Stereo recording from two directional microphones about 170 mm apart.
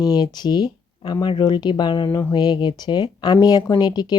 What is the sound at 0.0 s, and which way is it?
Speech, 25° left (ahead or behind).